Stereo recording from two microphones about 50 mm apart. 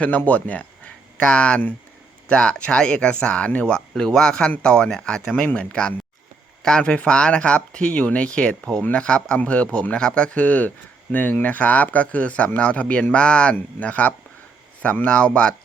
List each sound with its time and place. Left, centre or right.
0.3 s speech: left
1.2 s speech: left
3.8 s speech: centre